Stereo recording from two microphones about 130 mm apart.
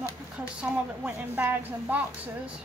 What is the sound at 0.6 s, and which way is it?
A woman's voice, 10° right (ahead or behind).